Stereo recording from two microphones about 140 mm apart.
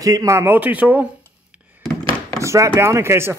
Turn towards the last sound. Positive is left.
turn(degrees=-20)  # may be behind; listen again after turning